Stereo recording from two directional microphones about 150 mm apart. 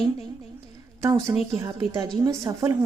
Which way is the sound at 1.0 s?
20° right (ahead or behind).